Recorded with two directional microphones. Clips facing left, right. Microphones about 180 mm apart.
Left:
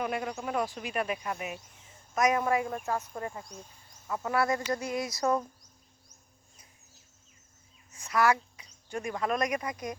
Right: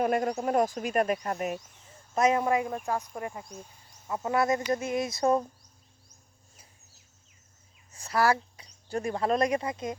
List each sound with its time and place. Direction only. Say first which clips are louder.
0.0 s speech: right 6 dB; 45° right (ahead or behind)
2.1 s insect: right 2 dB; 25° right (ahead or behind)
2.8 s speech: right 1 dB; 15° right (ahead or behind)
4.0 s insect: right 2 dB; 25° right (ahead or behind)
7.9 s speech: right 1 dB; 35° right (ahead or behind)